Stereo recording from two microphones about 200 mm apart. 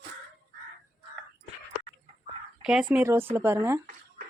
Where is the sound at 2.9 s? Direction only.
10° right (ahead or behind).